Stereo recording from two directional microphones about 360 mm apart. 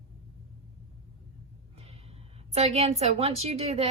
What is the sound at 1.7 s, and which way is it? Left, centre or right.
A woman's voice, centre.